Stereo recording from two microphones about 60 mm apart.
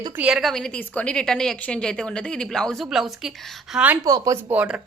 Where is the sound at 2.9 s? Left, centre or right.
Centre.